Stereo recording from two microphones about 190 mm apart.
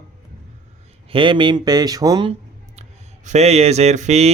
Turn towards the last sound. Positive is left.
turn(degrees=-35)  # may be behind; listen again after turning